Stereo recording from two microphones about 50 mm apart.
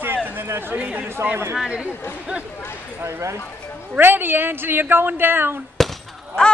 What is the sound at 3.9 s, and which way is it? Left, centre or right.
A woman's voice, right.